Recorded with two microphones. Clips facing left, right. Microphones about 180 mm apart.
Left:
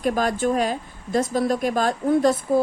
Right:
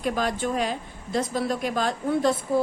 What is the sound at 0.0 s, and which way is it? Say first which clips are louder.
A woman's voice: left 4 dB; 45° left (ahead or behind).